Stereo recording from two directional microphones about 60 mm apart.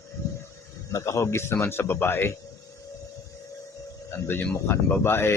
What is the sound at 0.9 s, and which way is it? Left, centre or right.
Speech, left.